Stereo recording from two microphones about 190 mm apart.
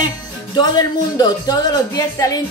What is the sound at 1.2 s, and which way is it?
Speech, 20° left (ahead or behind).